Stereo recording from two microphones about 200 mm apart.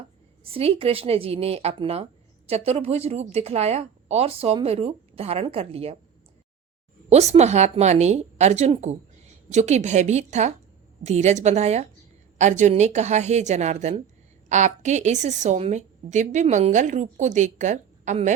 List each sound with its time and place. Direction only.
0.4 s a woman's voice: 30° right (ahead or behind)
7.1 s a woman's voice: 35° right (ahead or behind)